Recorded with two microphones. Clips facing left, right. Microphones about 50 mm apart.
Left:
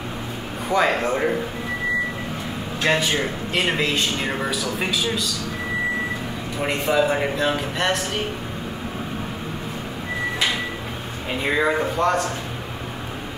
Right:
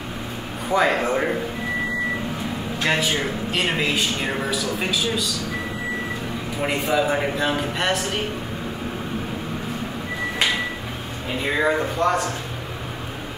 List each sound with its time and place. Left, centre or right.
0.7 s a man's voice: centre
2.8 s a man's voice: centre
6.6 s a man's voice: centre
11.5 s a man's voice: centre